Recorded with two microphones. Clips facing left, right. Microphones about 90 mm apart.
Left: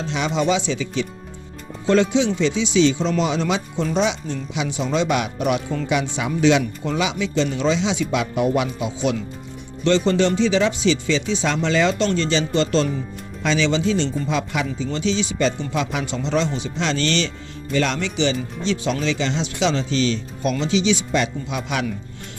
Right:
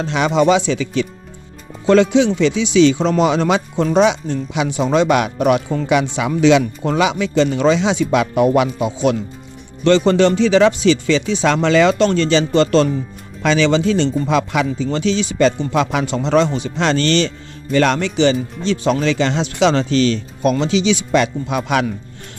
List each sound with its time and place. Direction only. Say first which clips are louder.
0.0 s speech: right 7 dB; 60° right (ahead or behind)
1.9 s speech: right 5 dB; 75° right (ahead or behind); by 5.6 s 55° right (ahead or behind)
5.9 s speech: right 6 dB; 80° right
6.8 s speech: right 6 dB; 55° right (ahead or behind)
9.8 s speech: right 5 dB; 70° right (ahead or behind); by 14.8 s 85° right
14.8 s speech: right 4 dB; 60° right (ahead or behind)
20.7 s speech: right 3 dB; 80° right
21.4 s speech: right 7 dB; 55° right (ahead or behind)